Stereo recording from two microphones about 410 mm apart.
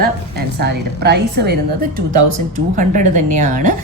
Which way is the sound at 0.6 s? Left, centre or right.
Right.